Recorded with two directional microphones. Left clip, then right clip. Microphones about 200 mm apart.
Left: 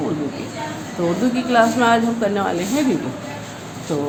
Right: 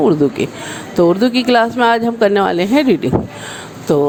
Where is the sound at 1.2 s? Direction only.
50° right (ahead or behind).